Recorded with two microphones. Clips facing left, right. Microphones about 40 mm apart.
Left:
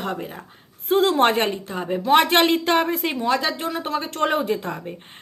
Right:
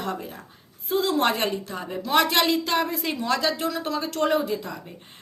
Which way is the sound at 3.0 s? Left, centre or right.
Left.